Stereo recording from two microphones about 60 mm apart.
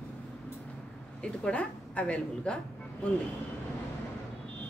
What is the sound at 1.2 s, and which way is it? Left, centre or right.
A woman's voice, centre.